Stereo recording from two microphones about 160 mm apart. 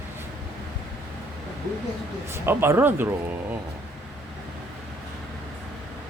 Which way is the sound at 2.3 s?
15° right (ahead or behind).